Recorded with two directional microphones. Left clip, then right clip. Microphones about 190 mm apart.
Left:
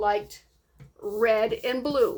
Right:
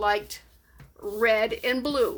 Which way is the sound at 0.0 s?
20° right (ahead or behind).